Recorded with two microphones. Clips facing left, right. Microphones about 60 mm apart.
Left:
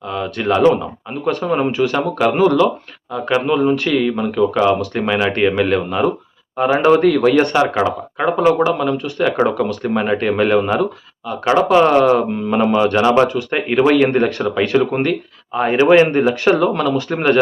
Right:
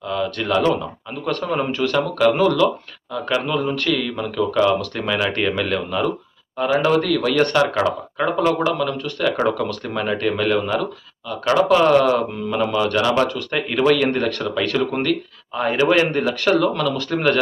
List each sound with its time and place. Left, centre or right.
0.0 s speech: centre
9.9 s speech: left